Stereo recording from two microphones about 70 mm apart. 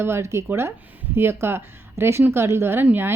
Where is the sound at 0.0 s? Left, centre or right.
Right.